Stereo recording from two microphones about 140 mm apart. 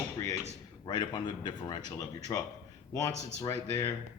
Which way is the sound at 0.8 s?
35° left (ahead or behind).